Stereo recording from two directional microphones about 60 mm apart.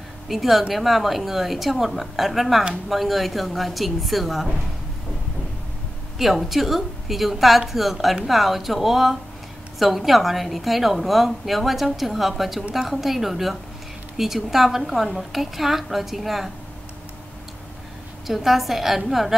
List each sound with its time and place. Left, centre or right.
0.3 s a woman's voice: centre
6.1 s a woman's voice: centre
18.2 s a woman's voice: centre